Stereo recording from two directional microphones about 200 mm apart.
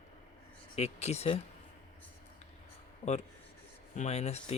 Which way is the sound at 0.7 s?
30° left (ahead or behind).